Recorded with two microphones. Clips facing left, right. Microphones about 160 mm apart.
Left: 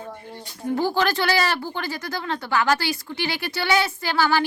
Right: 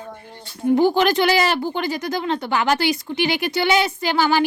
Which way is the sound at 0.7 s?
20° right (ahead or behind).